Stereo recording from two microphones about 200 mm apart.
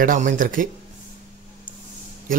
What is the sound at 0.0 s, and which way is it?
Speech, 40° right (ahead or behind).